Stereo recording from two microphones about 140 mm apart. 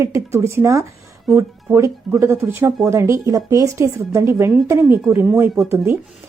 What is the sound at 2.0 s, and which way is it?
A woman's voice, 15° right (ahead or behind).